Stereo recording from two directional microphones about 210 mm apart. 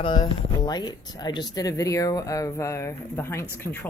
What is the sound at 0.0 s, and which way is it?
Speech, 20° left (ahead or behind).